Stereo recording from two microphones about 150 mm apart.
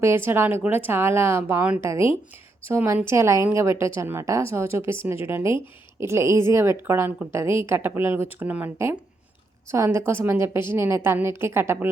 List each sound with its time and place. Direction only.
0.0 s a woman's voice: 15° right (ahead or behind)